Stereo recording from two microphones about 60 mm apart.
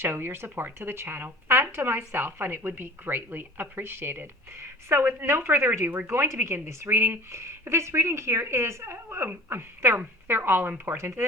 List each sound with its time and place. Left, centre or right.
0.0 s a woman's voice: right